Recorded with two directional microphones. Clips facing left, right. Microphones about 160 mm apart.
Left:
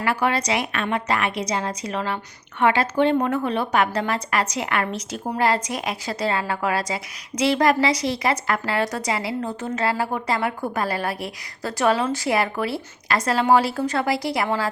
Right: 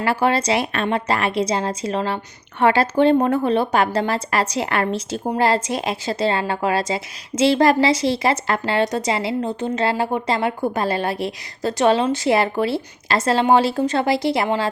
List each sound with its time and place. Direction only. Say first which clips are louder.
0.0 s a woman's voice: right 3 dB; 30° right (ahead or behind)